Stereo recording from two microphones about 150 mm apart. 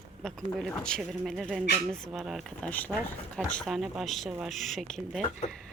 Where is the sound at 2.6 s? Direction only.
10° left (ahead or behind).